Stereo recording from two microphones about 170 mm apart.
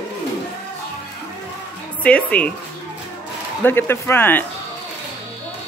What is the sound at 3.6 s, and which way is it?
Speech, 15° left (ahead or behind).